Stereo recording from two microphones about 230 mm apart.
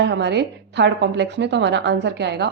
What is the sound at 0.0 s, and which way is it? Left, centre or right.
A woman's voice, right.